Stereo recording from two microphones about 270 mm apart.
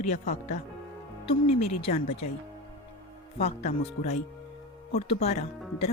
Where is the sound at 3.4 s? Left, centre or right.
Left.